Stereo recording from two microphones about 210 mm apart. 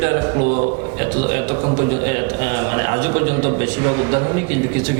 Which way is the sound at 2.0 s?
15° right (ahead or behind).